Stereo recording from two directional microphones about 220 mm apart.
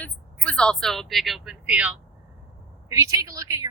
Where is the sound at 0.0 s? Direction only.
5° left (ahead or behind).